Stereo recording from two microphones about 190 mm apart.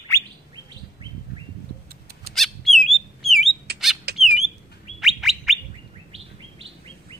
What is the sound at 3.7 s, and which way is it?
Squawk, 60° right (ahead or behind).